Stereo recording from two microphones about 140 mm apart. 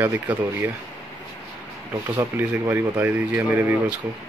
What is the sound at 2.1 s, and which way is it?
Speech, 15° right (ahead or behind).